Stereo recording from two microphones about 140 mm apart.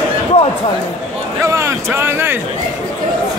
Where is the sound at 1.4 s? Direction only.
20° right (ahead or behind).